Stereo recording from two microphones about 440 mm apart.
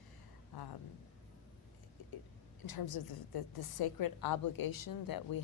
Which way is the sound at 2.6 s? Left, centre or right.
Left.